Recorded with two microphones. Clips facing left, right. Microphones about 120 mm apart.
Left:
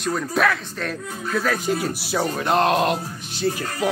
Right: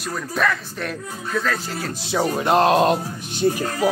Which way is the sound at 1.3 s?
15° left (ahead or behind).